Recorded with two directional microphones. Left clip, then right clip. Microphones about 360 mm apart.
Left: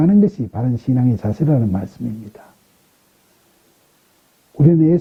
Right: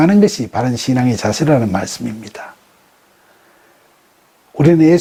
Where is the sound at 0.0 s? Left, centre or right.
Centre.